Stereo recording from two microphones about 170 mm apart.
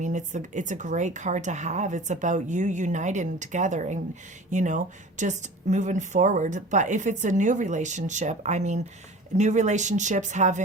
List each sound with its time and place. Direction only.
0.0 s speech: 45° right (ahead or behind)